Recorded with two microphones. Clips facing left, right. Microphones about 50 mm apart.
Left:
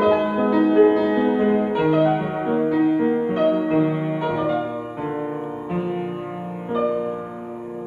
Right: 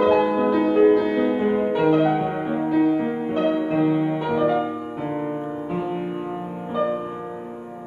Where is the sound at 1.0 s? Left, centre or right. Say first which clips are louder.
Left 2 dB; left.